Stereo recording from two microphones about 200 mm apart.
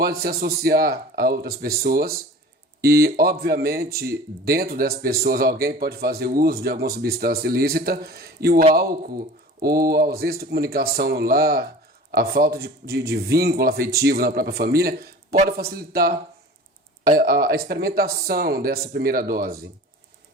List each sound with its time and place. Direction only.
0.0 s speech: 50° right (ahead or behind)
3.9 s speech: 15° right (ahead or behind)
4.4 s speech: 50° right (ahead or behind)